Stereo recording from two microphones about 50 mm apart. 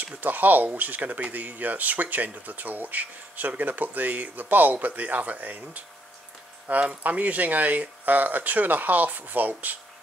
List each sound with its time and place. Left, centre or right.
0.0 s speech: right